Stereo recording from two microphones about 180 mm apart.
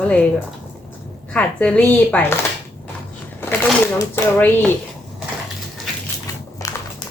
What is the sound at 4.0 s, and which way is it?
Speech, 15° left (ahead or behind).